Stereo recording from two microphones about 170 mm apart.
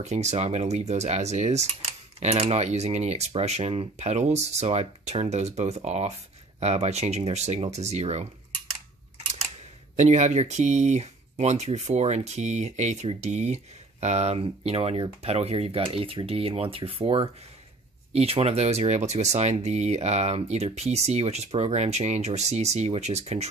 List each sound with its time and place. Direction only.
0.0 s speech: 40° right (ahead or behind)
9.9 s speech: 40° right (ahead or behind)